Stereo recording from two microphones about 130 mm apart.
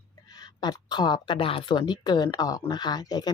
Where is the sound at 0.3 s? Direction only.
30° left (ahead or behind).